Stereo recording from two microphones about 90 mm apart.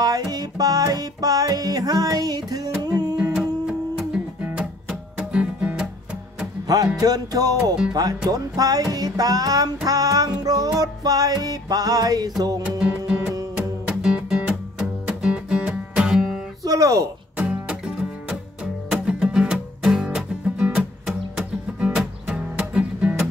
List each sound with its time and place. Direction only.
0.0 s music: 45° right (ahead or behind)
3.3 s music: 10° right (ahead or behind)
7.0 s music: 45° right (ahead or behind)
12.6 s music: 10° right (ahead or behind)
16.6 s speech: 40° right (ahead or behind)
17.4 s music: 10° right (ahead or behind)